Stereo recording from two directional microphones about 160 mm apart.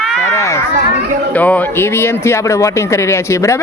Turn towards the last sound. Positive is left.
turn(degrees=15)  # may be behind; listen again after turning